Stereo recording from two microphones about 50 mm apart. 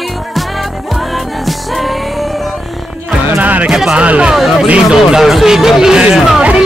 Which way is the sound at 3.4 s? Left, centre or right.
Right.